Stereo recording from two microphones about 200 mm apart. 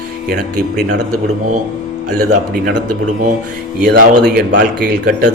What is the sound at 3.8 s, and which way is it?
Speech, 45° right (ahead or behind).